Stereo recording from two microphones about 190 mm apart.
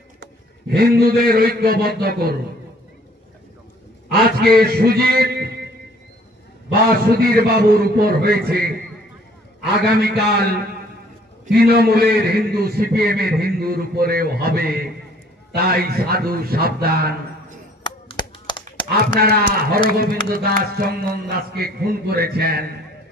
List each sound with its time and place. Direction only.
0.2 s a man's voice: 55° right (ahead or behind)
4.1 s a man's voice: 55° right (ahead or behind)
6.9 s a man's voice: 55° right (ahead or behind)
10.1 s a man's voice: 55° right (ahead or behind)
17.8 s chop: 25° left (ahead or behind)
18.9 s a man's voice: 55° right (ahead or behind)